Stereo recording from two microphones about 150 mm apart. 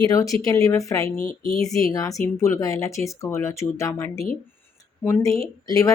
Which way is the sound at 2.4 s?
20° left (ahead or behind).